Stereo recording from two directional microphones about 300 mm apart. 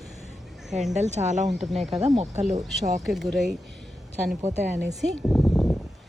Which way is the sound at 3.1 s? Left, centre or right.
Centre.